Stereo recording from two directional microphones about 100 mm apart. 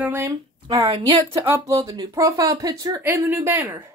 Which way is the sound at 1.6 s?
35° right (ahead or behind).